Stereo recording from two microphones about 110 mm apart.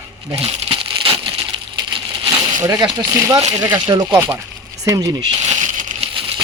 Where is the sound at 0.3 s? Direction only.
60° right (ahead or behind).